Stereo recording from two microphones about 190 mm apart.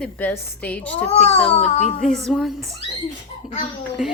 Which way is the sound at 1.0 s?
35° left (ahead or behind).